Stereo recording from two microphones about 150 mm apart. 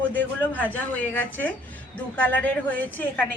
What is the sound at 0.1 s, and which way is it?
A woman's voice, 10° left (ahead or behind).